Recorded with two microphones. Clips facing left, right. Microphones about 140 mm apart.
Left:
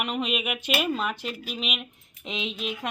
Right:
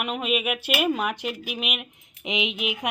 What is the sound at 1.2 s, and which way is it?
Speech, 60° right (ahead or behind).